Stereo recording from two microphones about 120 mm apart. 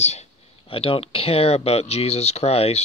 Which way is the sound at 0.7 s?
50° left (ahead or behind).